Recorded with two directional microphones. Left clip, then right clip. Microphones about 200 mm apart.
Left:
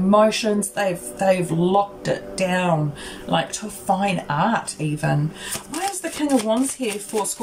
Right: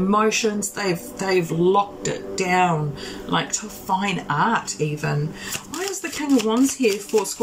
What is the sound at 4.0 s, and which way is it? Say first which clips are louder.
Speech: even; 25° left (ahead or behind).